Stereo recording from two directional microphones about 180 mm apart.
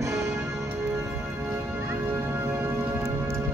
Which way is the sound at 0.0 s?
15° right (ahead or behind).